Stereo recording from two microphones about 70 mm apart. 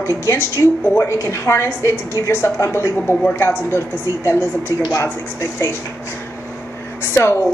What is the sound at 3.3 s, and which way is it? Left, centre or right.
A woman's voice, left.